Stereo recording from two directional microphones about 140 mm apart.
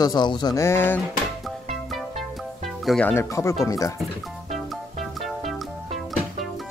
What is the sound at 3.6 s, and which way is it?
Speech, 25° left (ahead or behind).